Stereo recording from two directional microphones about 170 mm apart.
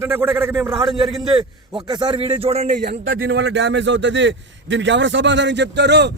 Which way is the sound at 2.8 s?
75° right (ahead or behind).